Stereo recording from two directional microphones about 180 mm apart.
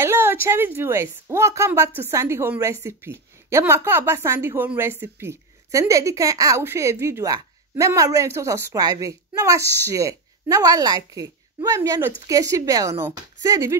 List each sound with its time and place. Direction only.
0.0 s a woman's voice: 15° right (ahead or behind)